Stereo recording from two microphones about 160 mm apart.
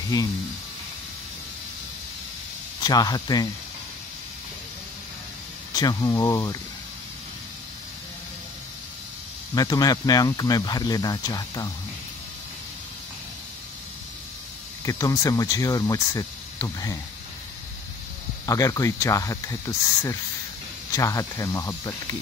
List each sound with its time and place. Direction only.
0.1 s speech: 25° left (ahead or behind)
2.8 s speech: 25° left (ahead or behind)
5.7 s speech: 25° left (ahead or behind)
9.6 s speech: 25° left (ahead or behind)
14.9 s speech: 20° left (ahead or behind)
18.4 s speech: 20° left (ahead or behind)